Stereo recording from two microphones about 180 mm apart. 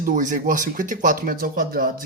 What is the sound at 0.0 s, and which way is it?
Speech, 45° right (ahead or behind).